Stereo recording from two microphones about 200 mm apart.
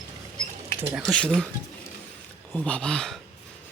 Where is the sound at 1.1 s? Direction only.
5° left (ahead or behind).